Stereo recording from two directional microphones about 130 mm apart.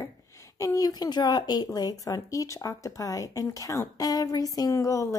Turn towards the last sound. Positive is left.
turn(degrees=25)  # may be behind; listen again after turning